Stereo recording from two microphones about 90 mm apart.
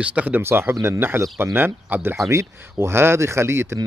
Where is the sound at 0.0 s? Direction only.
15° right (ahead or behind).